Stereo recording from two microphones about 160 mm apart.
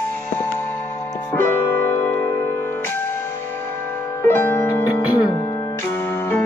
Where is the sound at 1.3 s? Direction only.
15° left (ahead or behind).